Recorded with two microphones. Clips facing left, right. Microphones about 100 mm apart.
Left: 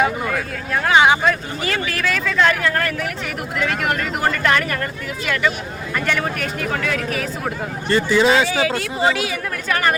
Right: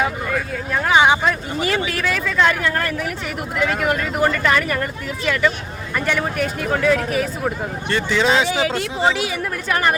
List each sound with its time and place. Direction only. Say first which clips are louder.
0.0 s speech: left 2 dB; centre (ahead or behind)
0.9 s speech: left 1 dB; 15° right (ahead or behind)
2.6 s speech: left 1 dB; 20° right (ahead or behind)
3.6 s speech: right 2 dB; 5° right (ahead or behind)
7.4 s speech: right 1 dB; 5° left (ahead or behind)
8.4 s speech: even; 20° right (ahead or behind)
8.7 s speech: even; centre (ahead or behind)